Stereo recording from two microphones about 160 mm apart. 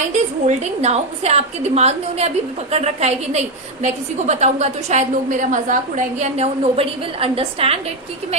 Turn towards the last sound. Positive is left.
turn(degrees=-35)  # may be behind; listen again after turning